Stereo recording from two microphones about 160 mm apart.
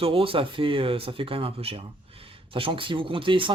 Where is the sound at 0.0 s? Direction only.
35° right (ahead or behind).